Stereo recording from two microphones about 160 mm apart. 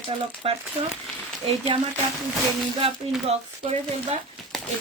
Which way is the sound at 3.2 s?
40° right (ahead or behind).